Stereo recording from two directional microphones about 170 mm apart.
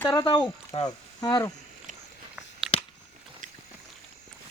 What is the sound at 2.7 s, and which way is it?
Biting, 5° right (ahead or behind).